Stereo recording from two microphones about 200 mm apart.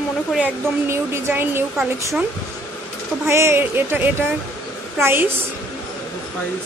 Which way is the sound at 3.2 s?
10° right (ahead or behind).